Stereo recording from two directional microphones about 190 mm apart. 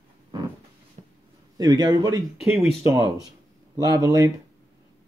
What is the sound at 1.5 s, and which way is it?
Speech, 20° right (ahead or behind).